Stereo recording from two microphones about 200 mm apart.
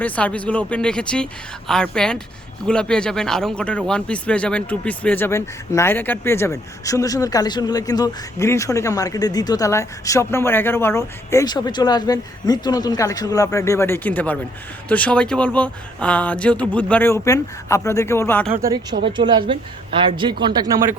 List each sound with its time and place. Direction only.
0.0 s speech: 5° left (ahead or behind)
18.6 s a woman's voice: 15° right (ahead or behind)